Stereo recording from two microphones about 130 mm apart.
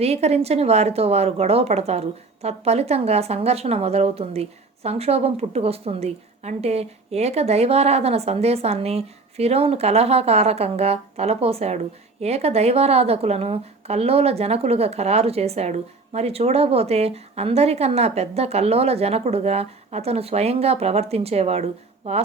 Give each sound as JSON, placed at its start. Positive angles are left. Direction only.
{"t": 0.0, "sound": "speech", "side_deg": -55}